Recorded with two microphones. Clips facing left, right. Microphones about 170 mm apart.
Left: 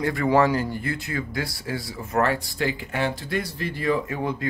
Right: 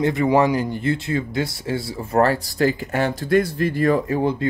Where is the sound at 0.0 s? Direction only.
20° right (ahead or behind); by 4.2 s 45° right (ahead or behind).